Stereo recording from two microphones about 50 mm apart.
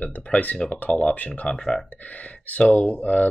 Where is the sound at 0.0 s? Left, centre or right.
Left.